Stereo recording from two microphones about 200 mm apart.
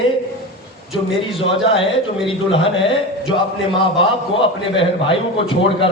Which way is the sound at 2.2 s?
25° left (ahead or behind).